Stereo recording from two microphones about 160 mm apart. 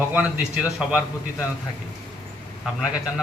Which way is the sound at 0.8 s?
5° right (ahead or behind).